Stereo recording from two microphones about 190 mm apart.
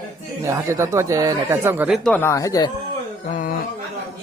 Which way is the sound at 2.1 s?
15° left (ahead or behind).